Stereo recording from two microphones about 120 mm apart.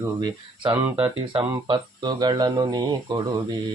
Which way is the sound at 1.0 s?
50° right (ahead or behind).